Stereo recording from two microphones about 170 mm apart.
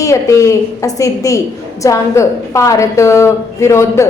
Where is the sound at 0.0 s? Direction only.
20° left (ahead or behind).